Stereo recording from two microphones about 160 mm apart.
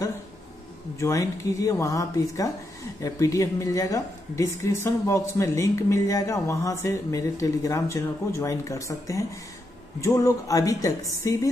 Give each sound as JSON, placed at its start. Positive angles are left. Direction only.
{"t": 0.9, "sound": "a woman's voice", "side_deg": 20}